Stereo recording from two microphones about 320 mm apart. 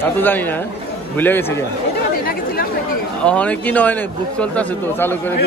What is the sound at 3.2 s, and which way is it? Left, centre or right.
A man's voice, centre.